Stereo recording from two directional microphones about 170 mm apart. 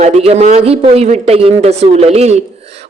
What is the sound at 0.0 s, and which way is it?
Speech, 40° right (ahead or behind).